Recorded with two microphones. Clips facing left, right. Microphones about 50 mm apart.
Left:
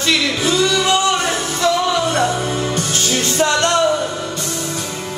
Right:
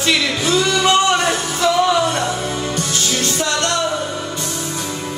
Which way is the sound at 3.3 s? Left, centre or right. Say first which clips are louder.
Left 7 dB; left.